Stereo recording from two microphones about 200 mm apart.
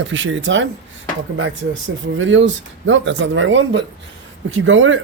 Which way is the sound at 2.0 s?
70° right (ahead or behind).